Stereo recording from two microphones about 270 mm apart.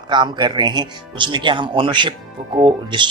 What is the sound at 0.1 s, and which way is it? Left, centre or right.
Speech, centre.